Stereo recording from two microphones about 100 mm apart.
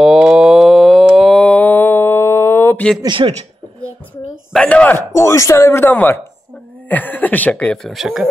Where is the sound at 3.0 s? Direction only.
55° right (ahead or behind).